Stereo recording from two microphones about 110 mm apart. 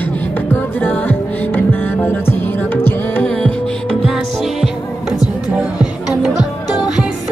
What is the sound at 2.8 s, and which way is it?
Music, 15° left (ahead or behind).